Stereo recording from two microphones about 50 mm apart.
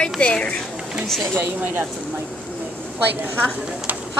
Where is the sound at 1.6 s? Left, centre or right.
Right.